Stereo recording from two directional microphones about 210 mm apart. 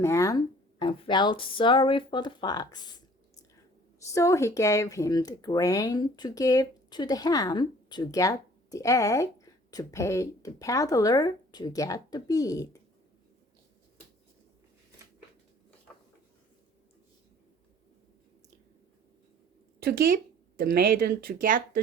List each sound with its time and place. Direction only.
0.0 s speech: 15° left (ahead or behind)
4.0 s speech: 15° left (ahead or behind)
19.8 s speech: 45° right (ahead or behind)